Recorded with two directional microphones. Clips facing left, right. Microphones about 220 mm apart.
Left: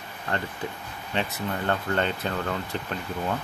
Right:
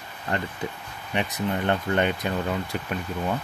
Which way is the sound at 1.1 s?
20° right (ahead or behind).